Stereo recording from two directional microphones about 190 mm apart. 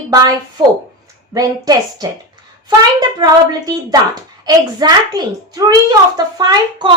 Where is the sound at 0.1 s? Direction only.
20° right (ahead or behind).